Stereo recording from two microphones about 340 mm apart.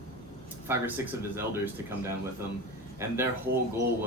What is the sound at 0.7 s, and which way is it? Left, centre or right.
Speech, centre.